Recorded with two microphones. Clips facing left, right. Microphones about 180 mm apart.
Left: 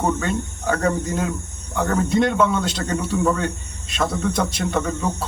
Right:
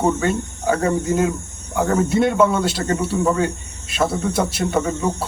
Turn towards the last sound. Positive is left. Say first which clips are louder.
# right 3 dB
turn(degrees=-5)  # may be behind; listen again after turning